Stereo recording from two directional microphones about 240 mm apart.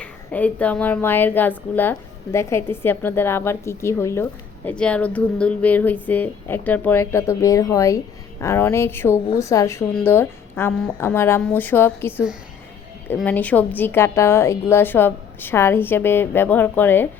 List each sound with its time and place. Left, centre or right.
0.0 s a woman's voice: centre